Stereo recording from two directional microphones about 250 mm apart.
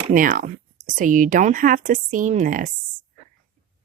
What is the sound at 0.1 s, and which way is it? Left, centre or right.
Speech, right.